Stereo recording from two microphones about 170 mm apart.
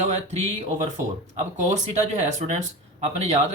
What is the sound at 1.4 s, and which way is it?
Speech, 45° right (ahead or behind).